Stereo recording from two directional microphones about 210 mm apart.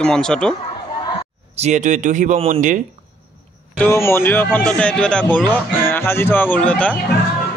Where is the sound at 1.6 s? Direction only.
35° right (ahead or behind).